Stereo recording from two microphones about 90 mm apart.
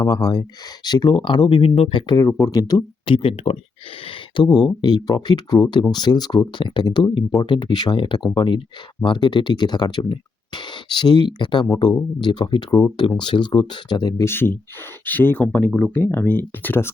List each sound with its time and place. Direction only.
0.0 s speech: 50° left (ahead or behind); by 1.7 s 70° left (ahead or behind)
1.8 s speech: 85° left
2.1 s speech: 40° left (ahead or behind)
3.1 s speech: 85° left
4.5 s speech: 50° left (ahead or behind)
13.0 s speech: 65° left (ahead or behind)
14.3 s speech: 25° left (ahead or behind)